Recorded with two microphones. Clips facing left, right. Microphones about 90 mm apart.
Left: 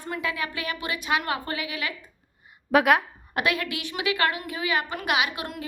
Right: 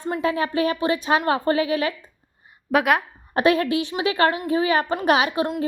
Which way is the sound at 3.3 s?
35° right (ahead or behind).